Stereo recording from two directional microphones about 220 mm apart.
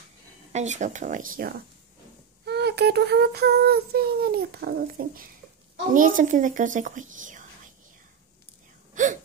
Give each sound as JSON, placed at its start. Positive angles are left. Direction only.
{"t": 0.5, "sound": "a woman's voice", "side_deg": -30}
{"t": 2.4, "sound": "child singing", "side_deg": -50}
{"t": 5.9, "sound": "a woman's voice", "side_deg": -35}
{"t": 8.9, "sound": "a sound", "side_deg": -35}